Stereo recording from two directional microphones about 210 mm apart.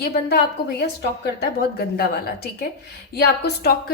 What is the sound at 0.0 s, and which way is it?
A woman's voice, 50° left (ahead or behind).